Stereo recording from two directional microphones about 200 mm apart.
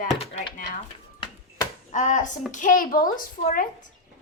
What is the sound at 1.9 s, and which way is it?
Child singing, 40° left (ahead or behind).